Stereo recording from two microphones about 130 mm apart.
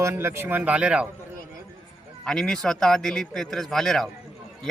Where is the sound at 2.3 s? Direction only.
5° left (ahead or behind).